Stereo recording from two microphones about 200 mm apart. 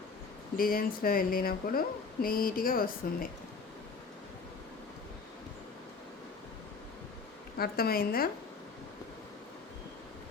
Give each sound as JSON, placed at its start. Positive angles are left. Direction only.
{"t": 0.5, "sound": "speech", "side_deg": 45}
{"t": 7.6, "sound": "speech", "side_deg": 50}